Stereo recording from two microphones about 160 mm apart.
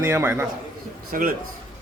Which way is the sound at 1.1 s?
60° right (ahead or behind).